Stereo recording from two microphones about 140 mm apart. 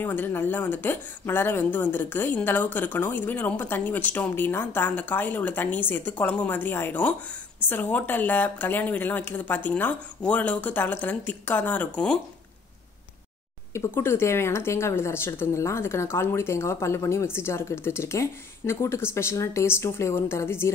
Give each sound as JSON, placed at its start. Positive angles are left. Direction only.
{"t": 0.0, "sound": "a woman's voice", "side_deg": 15}
{"t": 13.7, "sound": "speech", "side_deg": 15}